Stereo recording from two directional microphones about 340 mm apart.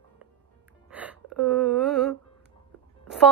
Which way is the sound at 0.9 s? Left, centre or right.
Centre.